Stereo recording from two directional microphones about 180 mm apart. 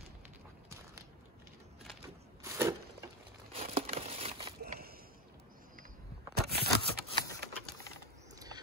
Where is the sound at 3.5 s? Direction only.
35° right (ahead or behind).